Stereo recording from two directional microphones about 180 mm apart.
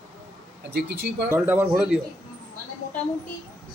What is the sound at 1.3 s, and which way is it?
Speech, 10° right (ahead or behind).